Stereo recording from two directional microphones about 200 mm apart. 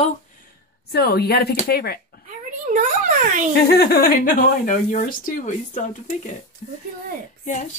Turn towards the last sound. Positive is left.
turn(degrees=40)  # may be behind; listen again after turning